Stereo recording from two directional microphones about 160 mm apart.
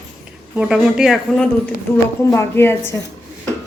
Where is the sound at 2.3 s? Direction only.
15° left (ahead or behind).